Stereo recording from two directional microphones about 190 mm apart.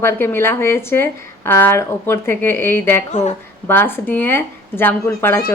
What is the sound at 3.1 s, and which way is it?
Speech, 40° left (ahead or behind).